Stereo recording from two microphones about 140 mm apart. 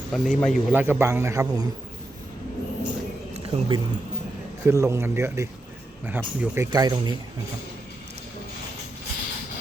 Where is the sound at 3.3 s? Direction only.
40° right (ahead or behind).